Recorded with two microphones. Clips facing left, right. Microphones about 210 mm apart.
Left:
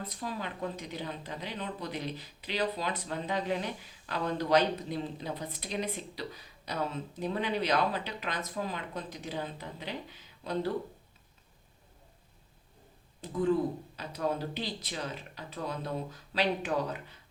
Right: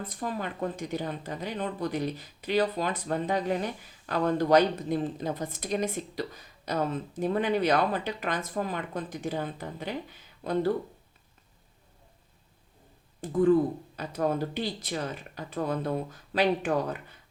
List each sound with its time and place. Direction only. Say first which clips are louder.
0.1 s speech: right 4 dB; 50° right (ahead or behind)
13.2 s speech: right 6 dB; 50° right (ahead or behind)